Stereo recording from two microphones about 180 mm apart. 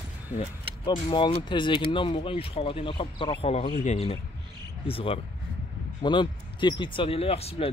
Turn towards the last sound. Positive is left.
turn(degrees=35)  # may be behind; listen again after turning